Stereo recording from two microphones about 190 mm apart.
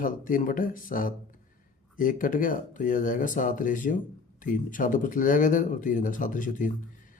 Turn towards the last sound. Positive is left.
turn(degrees=45)  # may be behind; listen again after turning